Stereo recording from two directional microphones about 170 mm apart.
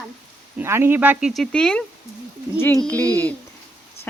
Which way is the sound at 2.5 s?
15° left (ahead or behind).